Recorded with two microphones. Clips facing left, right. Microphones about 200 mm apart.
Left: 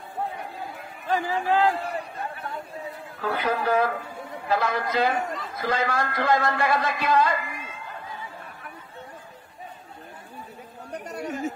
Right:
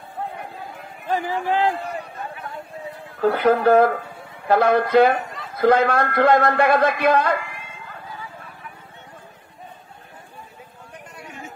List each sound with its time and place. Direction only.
1.0 s speech: 15° right (ahead or behind)
3.2 s a man's voice: 60° right (ahead or behind)
10.9 s a sound: 40° left (ahead or behind)